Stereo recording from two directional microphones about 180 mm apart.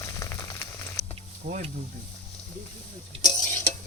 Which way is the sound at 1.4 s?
60° right (ahead or behind).